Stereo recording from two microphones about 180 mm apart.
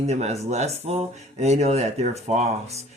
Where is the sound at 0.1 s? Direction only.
35° right (ahead or behind).